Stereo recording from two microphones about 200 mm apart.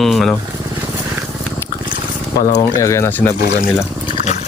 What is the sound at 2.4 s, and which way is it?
Speech, 40° left (ahead or behind).